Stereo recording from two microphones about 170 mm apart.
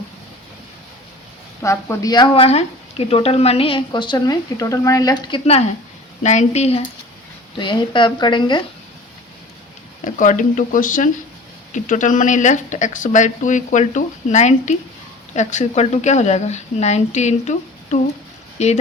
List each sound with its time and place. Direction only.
1.6 s speech: 15° left (ahead or behind)
6.2 s speech: 40° left (ahead or behind)
7.6 s speech: 25° left (ahead or behind)
10.0 s speech: 50° left (ahead or behind)
18.6 s speech: 40° left (ahead or behind)